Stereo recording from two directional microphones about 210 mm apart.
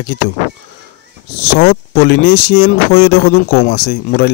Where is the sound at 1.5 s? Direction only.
50° left (ahead or behind).